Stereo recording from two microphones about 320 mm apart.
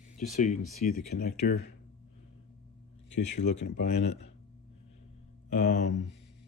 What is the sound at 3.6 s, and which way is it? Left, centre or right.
Speech, left.